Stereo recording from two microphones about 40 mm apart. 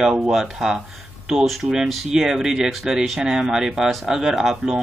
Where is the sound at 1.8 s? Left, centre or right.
Centre.